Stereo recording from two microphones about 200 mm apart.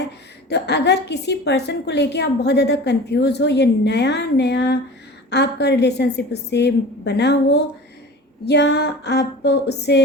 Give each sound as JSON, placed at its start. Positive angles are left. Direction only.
{"t": 0.4, "sound": "a woman's voice", "side_deg": 55}